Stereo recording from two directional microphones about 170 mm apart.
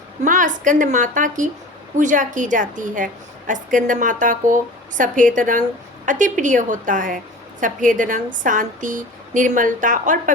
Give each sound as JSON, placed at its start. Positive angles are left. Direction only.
{"t": 0.2, "sound": "a woman's voice", "side_deg": -50}